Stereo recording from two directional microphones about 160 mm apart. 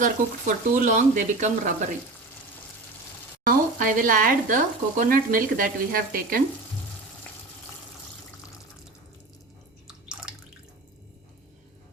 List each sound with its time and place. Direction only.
0.0 s speech: 55° right (ahead or behind)
3.4 s speech: 60° right (ahead or behind)
9.8 s drip: 5° right (ahead or behind)